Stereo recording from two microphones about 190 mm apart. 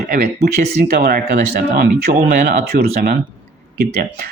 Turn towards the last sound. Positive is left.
turn(degrees=-50)  # may be behind; listen again after turning